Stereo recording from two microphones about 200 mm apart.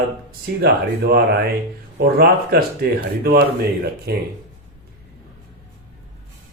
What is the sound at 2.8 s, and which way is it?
Speech, 50° right (ahead or behind).